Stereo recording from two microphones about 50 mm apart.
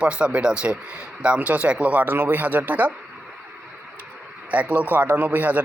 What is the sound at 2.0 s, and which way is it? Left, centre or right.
Speech, right.